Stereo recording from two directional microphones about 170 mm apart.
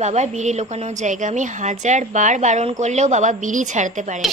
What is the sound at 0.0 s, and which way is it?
A woman's voice, 40° right (ahead or behind).